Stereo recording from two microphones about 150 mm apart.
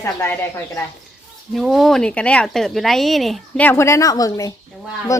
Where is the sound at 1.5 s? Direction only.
Centre (ahead or behind).